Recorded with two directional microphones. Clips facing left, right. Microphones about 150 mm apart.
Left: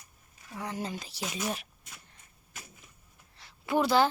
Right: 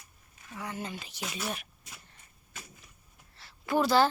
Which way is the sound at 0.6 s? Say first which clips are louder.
Left 2 dB; 35° left (ahead or behind).